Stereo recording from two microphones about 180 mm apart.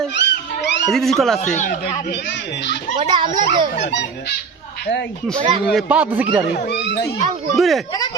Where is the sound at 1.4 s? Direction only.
40° left (ahead or behind).